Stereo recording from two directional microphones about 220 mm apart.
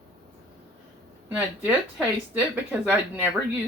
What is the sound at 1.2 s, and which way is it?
Speech, 5° right (ahead or behind).